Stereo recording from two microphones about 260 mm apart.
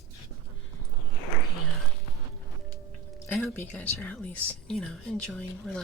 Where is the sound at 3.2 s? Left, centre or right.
Centre.